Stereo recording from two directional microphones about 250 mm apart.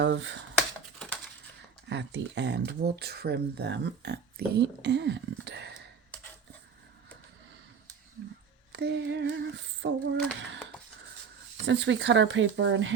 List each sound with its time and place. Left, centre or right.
0.0 s speech: right
0.5 s typing: centre
1.9 s speech: right
8.7 s a sound: right
11.6 s speech: right